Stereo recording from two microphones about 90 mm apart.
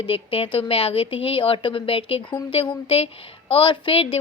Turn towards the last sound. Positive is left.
turn(degrees=85)